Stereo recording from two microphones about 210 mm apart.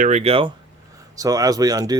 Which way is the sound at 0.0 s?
30° right (ahead or behind).